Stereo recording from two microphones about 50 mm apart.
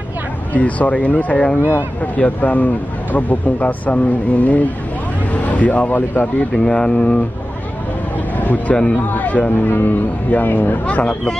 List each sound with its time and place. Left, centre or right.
0.5 s speech: left
6.5 s speech: centre
8.4 s speech: left
11.0 s speech: left